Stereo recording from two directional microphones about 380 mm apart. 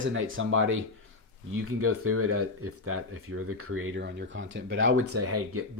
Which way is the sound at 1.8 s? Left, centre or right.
Right.